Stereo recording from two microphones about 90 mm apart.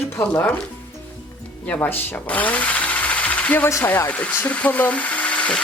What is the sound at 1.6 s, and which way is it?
Speech, 20° left (ahead or behind).